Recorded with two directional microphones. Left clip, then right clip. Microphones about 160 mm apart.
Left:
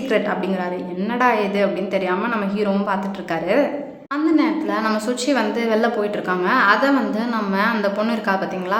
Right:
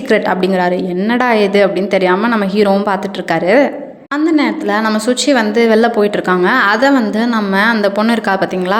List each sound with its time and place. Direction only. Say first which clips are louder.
0.1 s a woman's voice: right 8 dB; 50° right (ahead or behind)